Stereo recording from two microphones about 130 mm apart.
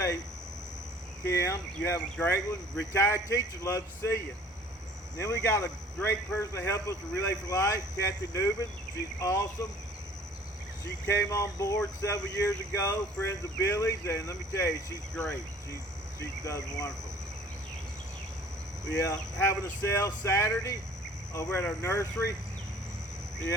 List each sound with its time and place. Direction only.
1.3 s speech: 20° left (ahead or behind)
11.0 s speech: 20° left (ahead or behind)
15.1 s speech: 5° left (ahead or behind)
16.4 s speech: 25° left (ahead or behind)
18.9 s speech: 25° left (ahead or behind)